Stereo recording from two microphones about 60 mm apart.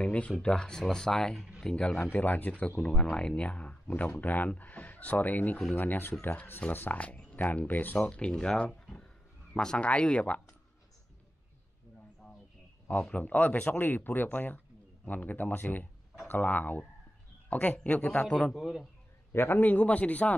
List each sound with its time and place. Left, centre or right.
0.0 s speech: left
2.1 s speech: left
2.8 s speech: centre; by 7.0 s left
7.0 s speech: left
8.0 s speech: centre
13.1 s a man's voice: left
18.5 s speech: centre
19.3 s a man's voice: left
19.6 s speech: left